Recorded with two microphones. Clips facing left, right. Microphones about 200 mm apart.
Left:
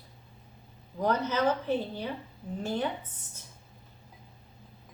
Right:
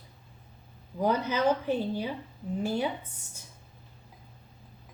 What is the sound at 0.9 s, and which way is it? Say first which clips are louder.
A woman's voice: right 1 dB; 10° right (ahead or behind).